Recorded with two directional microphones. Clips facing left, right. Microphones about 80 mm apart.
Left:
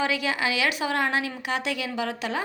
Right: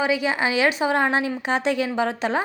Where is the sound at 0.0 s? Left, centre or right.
Right.